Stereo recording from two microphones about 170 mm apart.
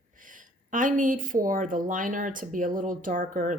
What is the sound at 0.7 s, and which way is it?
A woman's voice, 50° right (ahead or behind).